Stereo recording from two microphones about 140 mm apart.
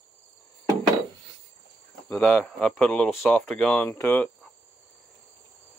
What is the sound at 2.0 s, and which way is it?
Speech, 15° left (ahead or behind).